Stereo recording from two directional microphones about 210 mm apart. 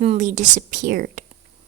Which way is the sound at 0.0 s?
35° right (ahead or behind).